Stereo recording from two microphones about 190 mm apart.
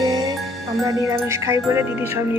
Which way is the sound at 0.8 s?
15° right (ahead or behind).